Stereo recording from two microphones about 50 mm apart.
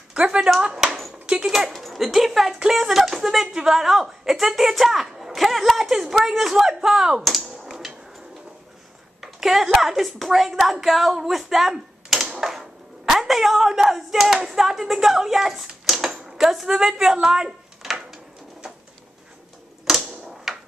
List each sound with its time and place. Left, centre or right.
0.6 s speech: centre
1.2 s dog: right
1.7 s a woman's voice: centre
9.2 s speech: centre
19.9 s typewriter: centre